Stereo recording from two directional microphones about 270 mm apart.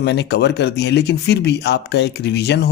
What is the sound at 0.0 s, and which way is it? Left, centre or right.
Speech, left.